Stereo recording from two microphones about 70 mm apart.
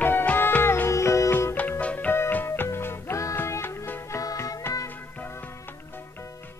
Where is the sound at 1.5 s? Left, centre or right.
Left.